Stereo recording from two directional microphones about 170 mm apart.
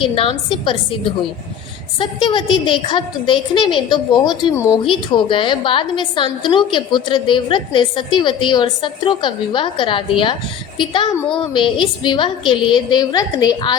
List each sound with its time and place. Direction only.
0.0 s a woman's voice: 30° left (ahead or behind)
2.0 s a woman's voice: 25° left (ahead or behind)
4.8 s a woman's voice: 30° left (ahead or behind)